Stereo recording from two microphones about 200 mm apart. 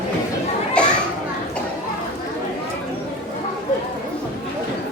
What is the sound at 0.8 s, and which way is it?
Children playing, 5° left (ahead or behind).